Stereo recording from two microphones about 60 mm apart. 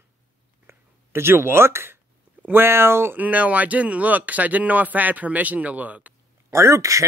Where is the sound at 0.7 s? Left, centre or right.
Right.